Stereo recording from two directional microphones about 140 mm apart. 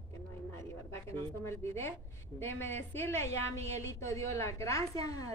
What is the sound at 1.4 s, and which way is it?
A woman's voice, 20° left (ahead or behind).